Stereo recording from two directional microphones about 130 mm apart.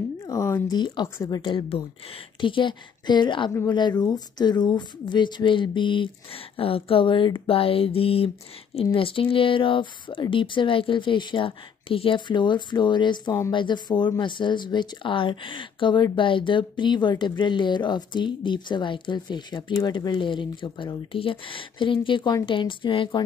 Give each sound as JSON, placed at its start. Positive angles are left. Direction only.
{"t": 0.2, "sound": "a sound", "side_deg": 20}
{"t": 0.7, "sound": "speech", "side_deg": 35}
{"t": 1.0, "sound": "a woman's voice", "side_deg": 20}
{"t": 1.4, "sound": "speech", "side_deg": 40}